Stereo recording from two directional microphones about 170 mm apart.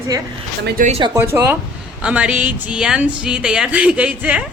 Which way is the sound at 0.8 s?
55° right (ahead or behind).